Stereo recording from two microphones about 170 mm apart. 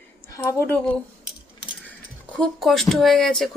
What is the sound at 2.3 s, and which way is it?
Speech, centre (ahead or behind).